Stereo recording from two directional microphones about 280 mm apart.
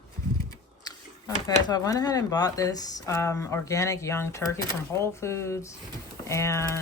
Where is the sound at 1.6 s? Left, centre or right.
Centre.